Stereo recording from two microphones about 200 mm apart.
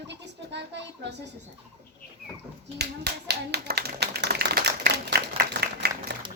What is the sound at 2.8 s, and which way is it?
Speech, 55° right (ahead or behind).